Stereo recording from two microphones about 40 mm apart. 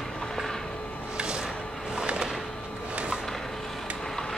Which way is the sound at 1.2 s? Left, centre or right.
Right.